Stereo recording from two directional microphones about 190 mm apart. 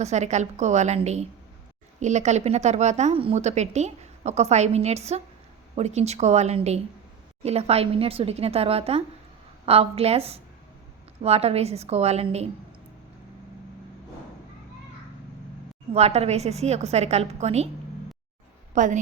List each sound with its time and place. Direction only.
0.0 s a woman's voice: 35° right (ahead or behind)
15.9 s a woman's voice: 35° right (ahead or behind)
18.7 s a woman's voice: 40° right (ahead or behind)